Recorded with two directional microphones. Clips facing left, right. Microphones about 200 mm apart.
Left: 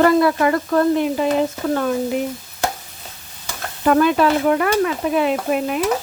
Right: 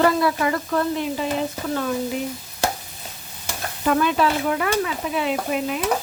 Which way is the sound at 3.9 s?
50° left (ahead or behind).